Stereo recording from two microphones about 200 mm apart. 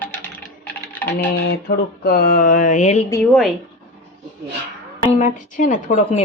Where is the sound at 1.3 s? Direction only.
55° left (ahead or behind); by 3.0 s 40° left (ahead or behind).